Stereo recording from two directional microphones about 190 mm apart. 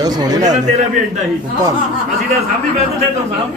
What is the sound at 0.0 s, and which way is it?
Speech, 20° right (ahead or behind).